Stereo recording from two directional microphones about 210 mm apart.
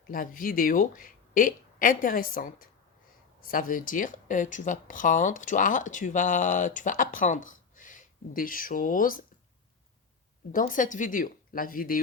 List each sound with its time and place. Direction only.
0.1 s speech: 40° left (ahead or behind)
10.5 s speech: 40° left (ahead or behind)